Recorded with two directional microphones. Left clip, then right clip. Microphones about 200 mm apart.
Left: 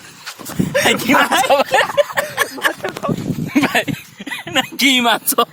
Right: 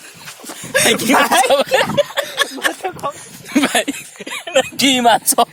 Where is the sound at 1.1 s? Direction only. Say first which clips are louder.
Right 2 dB; 60° right (ahead or behind).